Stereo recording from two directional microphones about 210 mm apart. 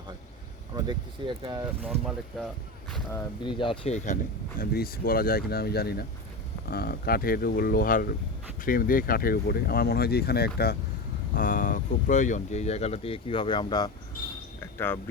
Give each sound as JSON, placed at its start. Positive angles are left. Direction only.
{"t": 0.8, "sound": "speech", "side_deg": -20}
{"t": 1.8, "sound": "speech", "side_deg": 0}
{"t": 3.1, "sound": "speech", "side_deg": 25}
{"t": 14.6, "sound": "a sound", "side_deg": 10}